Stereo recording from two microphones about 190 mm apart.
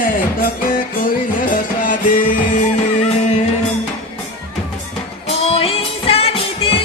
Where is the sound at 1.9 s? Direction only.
45° left (ahead or behind).